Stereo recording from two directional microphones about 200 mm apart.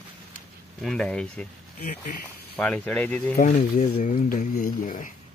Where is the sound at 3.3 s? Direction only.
40° left (ahead or behind).